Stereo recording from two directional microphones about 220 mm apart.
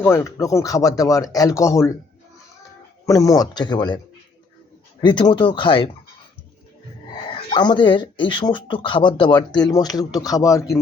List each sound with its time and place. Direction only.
0.0 s speech: 15° left (ahead or behind)
3.1 s speech: 15° left (ahead or behind)
7.5 s speech: 20° left (ahead or behind)